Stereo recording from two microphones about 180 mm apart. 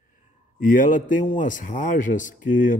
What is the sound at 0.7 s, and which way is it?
A man's voice, 50° left (ahead or behind).